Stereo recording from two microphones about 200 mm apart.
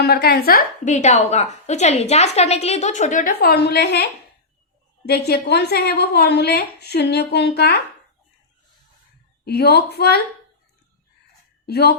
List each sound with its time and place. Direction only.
0.0 s a woman's voice: 50° left (ahead or behind)
9.4 s a woman's voice: 50° left (ahead or behind)
11.6 s a woman's voice: 55° left (ahead or behind)